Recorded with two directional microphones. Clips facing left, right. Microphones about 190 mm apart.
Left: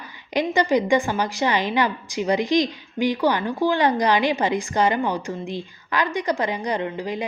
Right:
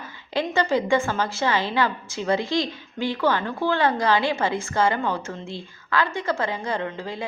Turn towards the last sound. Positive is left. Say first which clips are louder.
# left 3 dB
turn(degrees=15)  # may be behind; listen again after turning